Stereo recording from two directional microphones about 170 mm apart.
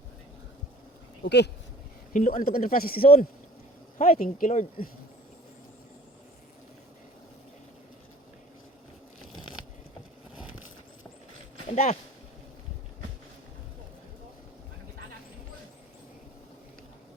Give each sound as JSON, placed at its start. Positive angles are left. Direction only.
{"t": 1.2, "sound": "speech", "side_deg": 90}
{"t": 2.1, "sound": "speech", "side_deg": 50}
{"t": 11.7, "sound": "speech", "side_deg": 45}